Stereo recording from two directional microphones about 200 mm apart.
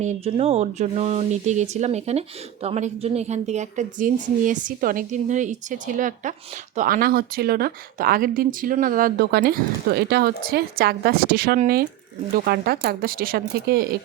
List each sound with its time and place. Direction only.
0.0 s speech: 35° right (ahead or behind); by 13.8 s 50° right (ahead or behind)